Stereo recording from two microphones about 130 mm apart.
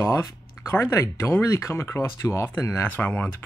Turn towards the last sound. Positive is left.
turn(degrees=15)  # may be behind; listen again after turning